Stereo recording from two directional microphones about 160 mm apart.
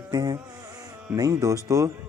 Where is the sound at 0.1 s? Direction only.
25° right (ahead or behind).